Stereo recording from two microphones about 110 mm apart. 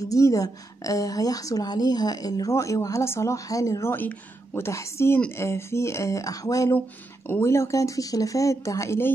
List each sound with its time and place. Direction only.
0.0 s a woman's voice: 30° left (ahead or behind)
3.9 s speech: 15° left (ahead or behind)